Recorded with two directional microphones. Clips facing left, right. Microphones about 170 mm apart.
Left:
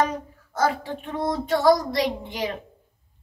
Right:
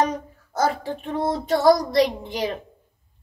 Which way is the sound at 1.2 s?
35° right (ahead or behind).